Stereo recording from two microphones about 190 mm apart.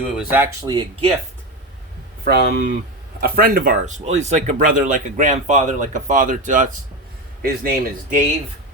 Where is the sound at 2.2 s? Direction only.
55° right (ahead or behind); by 6.7 s 40° right (ahead or behind).